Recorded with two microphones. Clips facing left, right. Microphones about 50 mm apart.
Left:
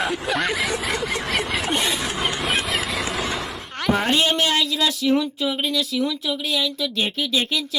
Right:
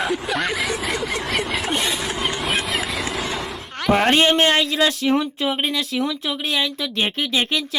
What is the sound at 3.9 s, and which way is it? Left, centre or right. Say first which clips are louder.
Speech: right 5 dB; right.